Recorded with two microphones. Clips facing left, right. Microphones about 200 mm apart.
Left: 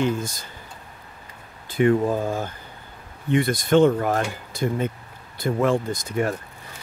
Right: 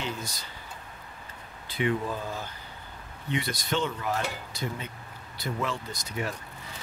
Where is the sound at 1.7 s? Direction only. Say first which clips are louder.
Left 9 dB; 45° left (ahead or behind).